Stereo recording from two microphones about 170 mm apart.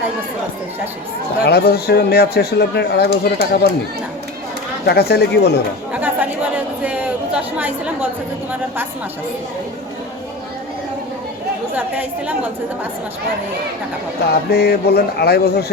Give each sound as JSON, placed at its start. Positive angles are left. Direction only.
{"t": 1.5, "sound": "speech", "side_deg": 70}
{"t": 4.9, "sound": "speech", "side_deg": 75}
{"t": 5.9, "sound": "chatter", "side_deg": -10}
{"t": 11.7, "sound": "a woman's voice", "side_deg": -10}
{"t": 14.5, "sound": "speech", "side_deg": 65}